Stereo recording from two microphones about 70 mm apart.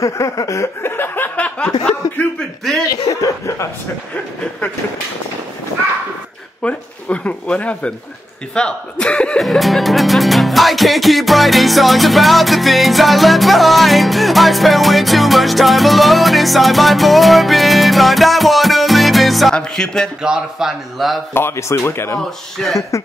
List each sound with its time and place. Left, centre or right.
0.0 s speech: left
0.8 s a sound: left
1.9 s speech: centre
2.9 s speech: left
6.6 s speech: centre
9.4 s speech: centre
20.2 s speech: centre
21.3 s speech: left
22.8 s speech: left